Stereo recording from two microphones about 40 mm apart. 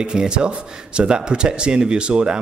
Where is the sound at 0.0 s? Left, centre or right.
Right.